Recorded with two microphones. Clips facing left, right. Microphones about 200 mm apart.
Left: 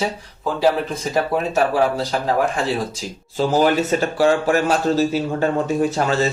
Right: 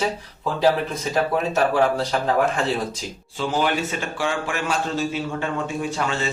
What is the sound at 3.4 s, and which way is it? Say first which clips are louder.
A man's voice: left 6 dB; 40° left (ahead or behind).